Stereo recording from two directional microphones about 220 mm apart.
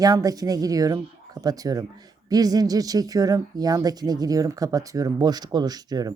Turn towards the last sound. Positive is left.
turn(degrees=-15)  # may be behind; listen again after turning